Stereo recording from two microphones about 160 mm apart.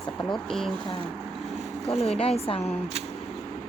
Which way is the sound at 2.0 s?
40° left (ahead or behind).